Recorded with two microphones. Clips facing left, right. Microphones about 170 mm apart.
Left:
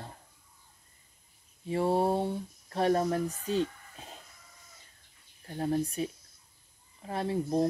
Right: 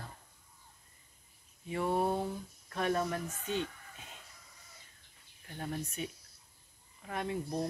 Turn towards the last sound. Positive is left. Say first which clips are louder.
# left 7 dB
turn(degrees=30)  # may be behind; listen again after turning